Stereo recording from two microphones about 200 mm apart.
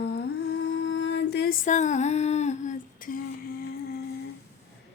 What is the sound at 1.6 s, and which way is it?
Humming, 35° left (ahead or behind).